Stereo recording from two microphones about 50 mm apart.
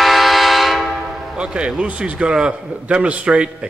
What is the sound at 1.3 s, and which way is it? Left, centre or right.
A man's voice, centre.